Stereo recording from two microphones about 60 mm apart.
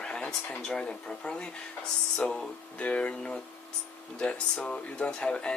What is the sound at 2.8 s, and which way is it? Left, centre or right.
Speech, left.